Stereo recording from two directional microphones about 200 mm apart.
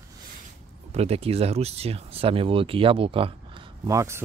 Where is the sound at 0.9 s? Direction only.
30° right (ahead or behind).